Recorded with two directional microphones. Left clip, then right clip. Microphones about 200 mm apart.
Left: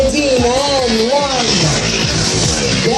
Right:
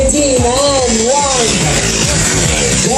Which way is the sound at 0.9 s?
20° right (ahead or behind).